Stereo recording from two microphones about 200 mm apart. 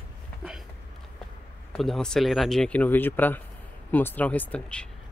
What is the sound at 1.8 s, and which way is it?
Speech, centre (ahead or behind).